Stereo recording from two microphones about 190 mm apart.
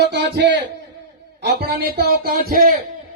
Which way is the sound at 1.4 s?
55° right (ahead or behind).